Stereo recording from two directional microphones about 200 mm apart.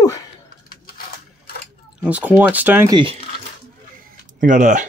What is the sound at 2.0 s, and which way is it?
Speech, 5° right (ahead or behind).